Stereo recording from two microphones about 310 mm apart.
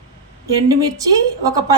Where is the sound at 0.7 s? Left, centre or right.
Centre.